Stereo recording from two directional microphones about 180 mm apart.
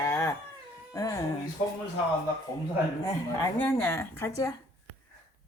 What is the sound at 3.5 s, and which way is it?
Speech, 10° left (ahead or behind).